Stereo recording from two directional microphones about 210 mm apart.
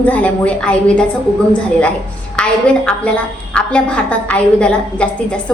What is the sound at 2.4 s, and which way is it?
A woman's voice, 5° left (ahead or behind).